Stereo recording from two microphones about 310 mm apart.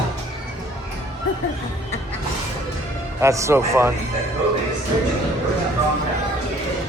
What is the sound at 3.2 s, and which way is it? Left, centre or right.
Speech, centre.